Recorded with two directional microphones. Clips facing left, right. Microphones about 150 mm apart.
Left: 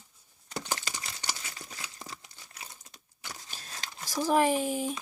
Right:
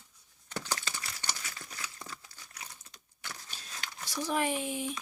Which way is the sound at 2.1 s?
20° left (ahead or behind).